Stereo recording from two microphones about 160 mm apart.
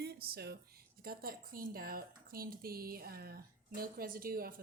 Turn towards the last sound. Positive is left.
turn(degrees=-65)  # may be behind; listen again after turning